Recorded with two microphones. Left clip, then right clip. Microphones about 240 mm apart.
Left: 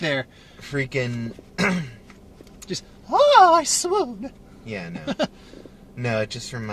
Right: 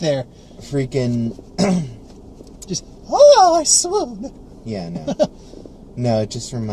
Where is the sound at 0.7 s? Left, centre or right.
Centre.